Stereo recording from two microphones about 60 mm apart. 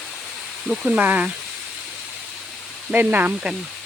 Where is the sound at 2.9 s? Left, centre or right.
Right.